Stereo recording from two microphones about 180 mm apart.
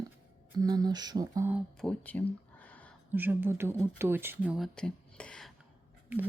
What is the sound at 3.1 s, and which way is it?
Speech, 10° right (ahead or behind).